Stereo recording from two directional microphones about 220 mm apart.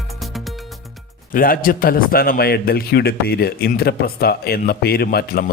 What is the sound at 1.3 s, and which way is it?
A man's voice, 40° left (ahead or behind).